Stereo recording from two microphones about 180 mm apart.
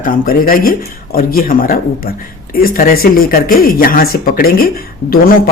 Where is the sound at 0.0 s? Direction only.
55° left (ahead or behind).